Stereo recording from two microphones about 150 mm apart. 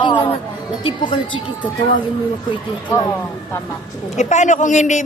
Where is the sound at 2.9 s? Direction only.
20° left (ahead or behind).